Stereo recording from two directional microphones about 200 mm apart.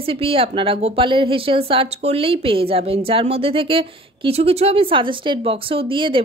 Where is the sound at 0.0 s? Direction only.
30° right (ahead or behind).